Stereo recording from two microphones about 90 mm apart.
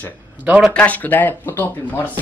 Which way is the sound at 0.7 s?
15° left (ahead or behind).